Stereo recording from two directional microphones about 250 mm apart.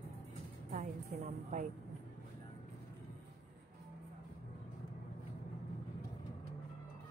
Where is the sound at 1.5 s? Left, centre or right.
Right.